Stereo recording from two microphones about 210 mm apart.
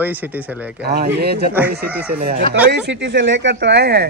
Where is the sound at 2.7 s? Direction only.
55° right (ahead or behind).